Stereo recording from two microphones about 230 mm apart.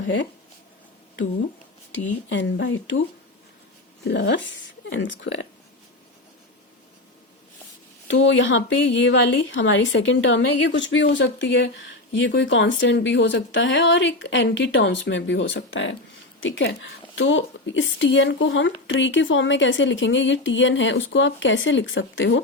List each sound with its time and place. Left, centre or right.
1.9 s speech: left
4.0 s speech: left
8.1 s speech: left